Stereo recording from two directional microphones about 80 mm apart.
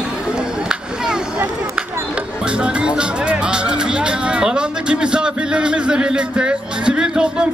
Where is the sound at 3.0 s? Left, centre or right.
Centre.